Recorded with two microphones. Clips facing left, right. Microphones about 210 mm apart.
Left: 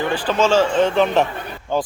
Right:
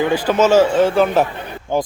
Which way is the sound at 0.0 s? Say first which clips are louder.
Right 4 dB; 10° right (ahead or behind).